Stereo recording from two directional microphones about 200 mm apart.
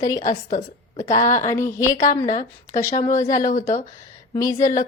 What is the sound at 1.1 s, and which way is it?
Speech, 40° left (ahead or behind).